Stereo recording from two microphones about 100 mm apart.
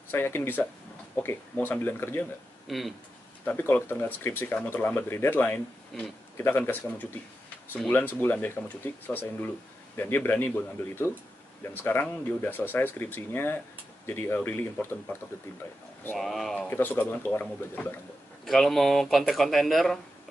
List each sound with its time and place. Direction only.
0.1 s speech: 25° left (ahead or behind)
2.7 s speech: centre (ahead or behind)
3.4 s speech: 20° left (ahead or behind)
16.2 s speech: 5° left (ahead or behind)
16.6 s speech: 20° left (ahead or behind)
18.4 s speech: centre (ahead or behind)